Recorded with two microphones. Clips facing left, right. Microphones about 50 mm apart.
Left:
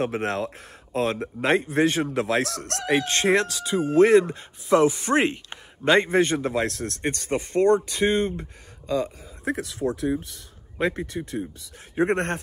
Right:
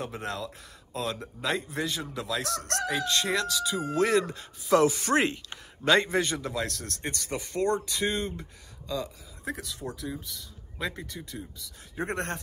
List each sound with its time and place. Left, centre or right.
0.0 s speech: left